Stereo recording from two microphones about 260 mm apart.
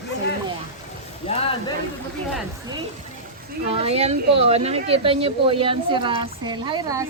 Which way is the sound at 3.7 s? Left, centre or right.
Right.